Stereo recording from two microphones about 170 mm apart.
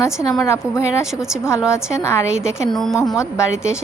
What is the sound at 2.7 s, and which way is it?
Speech, centre (ahead or behind).